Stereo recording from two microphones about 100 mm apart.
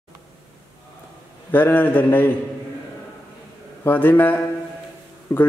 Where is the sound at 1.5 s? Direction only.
20° left (ahead or behind).